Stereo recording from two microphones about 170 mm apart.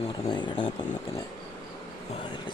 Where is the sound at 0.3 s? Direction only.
25° left (ahead or behind).